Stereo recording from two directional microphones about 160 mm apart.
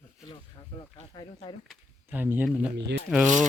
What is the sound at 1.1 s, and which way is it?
Speech, 30° left (ahead or behind).